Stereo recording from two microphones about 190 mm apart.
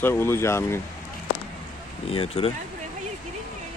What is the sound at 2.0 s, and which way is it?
Speech, 30° left (ahead or behind).